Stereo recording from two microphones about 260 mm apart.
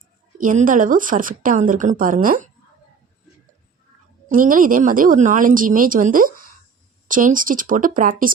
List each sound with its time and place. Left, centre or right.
0.4 s speech: right
4.3 s speech: right